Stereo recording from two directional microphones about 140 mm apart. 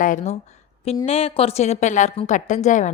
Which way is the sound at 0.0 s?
65° left (ahead or behind).